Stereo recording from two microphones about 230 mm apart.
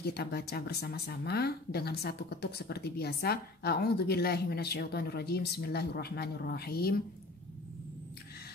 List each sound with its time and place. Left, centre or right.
0.0 s speech: left